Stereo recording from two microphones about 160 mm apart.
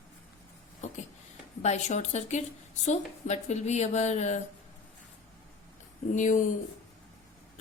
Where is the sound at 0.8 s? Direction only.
50° left (ahead or behind).